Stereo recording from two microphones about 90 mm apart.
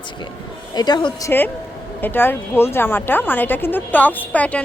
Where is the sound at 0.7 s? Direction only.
50° left (ahead or behind).